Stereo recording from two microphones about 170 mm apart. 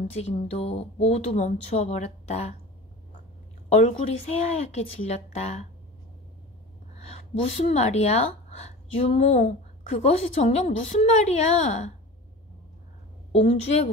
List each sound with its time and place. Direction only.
0.0 s speech: 40° left (ahead or behind)
3.6 s speech: 45° left (ahead or behind)
7.0 s speech: 40° left (ahead or behind)
13.3 s speech: 40° left (ahead or behind)